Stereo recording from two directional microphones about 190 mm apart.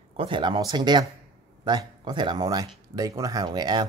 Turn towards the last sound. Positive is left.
turn(degrees=-20)  # may be behind; listen again after turning